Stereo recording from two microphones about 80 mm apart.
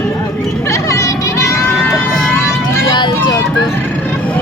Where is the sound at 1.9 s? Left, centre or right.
Centre.